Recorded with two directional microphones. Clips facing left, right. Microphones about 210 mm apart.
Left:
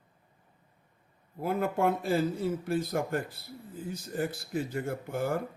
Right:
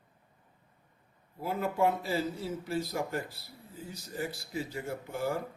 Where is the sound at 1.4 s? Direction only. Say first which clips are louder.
Left 1 dB; 55° left (ahead or behind).